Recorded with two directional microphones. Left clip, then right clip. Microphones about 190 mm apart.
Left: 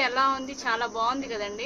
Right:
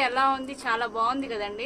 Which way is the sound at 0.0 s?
10° right (ahead or behind).